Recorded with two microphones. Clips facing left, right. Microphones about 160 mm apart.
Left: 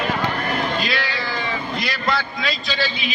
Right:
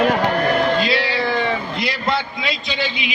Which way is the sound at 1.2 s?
60° right (ahead or behind).